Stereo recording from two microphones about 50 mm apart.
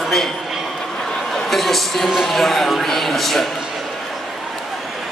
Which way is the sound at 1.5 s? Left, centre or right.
Centre.